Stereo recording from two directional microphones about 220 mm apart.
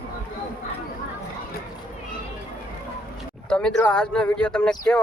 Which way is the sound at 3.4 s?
5° left (ahead or behind).